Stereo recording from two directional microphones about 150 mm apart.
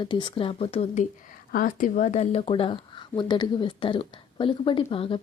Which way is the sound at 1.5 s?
70° left (ahead or behind).